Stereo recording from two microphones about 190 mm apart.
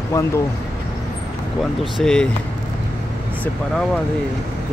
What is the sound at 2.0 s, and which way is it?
Speech, 5° left (ahead or behind).